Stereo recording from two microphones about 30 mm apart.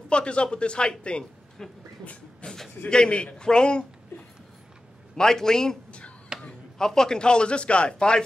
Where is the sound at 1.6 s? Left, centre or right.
Centre.